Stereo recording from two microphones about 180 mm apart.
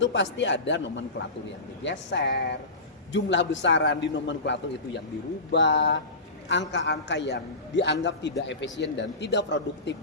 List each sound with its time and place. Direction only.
0.0 s a man's voice: 90° left; by 7.9 s 75° left (ahead or behind)
8.0 s a man's voice: 90° left
8.8 s a man's voice: 70° left (ahead or behind)